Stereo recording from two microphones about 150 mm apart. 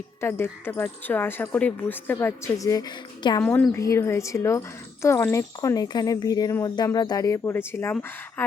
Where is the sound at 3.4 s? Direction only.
10° left (ahead or behind).